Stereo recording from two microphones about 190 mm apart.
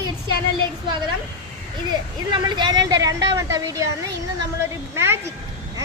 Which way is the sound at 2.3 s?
25° right (ahead or behind).